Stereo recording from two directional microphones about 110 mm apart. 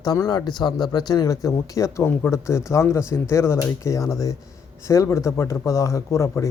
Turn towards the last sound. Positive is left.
turn(degrees=25)  # may be behind; listen again after turning